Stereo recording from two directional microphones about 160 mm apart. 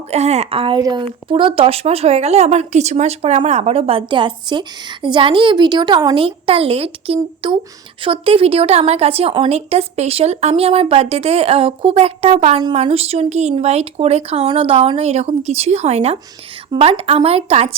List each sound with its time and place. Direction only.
0.1 s speech: 40° right (ahead or behind)
0.8 s a woman's voice: 25° right (ahead or behind)